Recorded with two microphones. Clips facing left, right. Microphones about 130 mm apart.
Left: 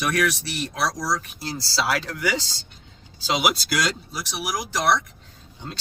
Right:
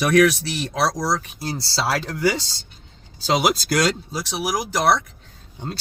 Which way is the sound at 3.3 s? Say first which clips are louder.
Right 4 dB; 45° right (ahead or behind).